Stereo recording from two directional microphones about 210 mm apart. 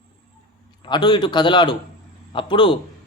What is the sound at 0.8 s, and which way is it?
A man's voice, 20° left (ahead or behind).